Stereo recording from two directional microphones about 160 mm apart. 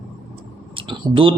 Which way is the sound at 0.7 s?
35° right (ahead or behind).